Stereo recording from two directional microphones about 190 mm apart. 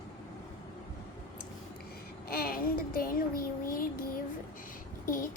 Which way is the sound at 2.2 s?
50° left (ahead or behind).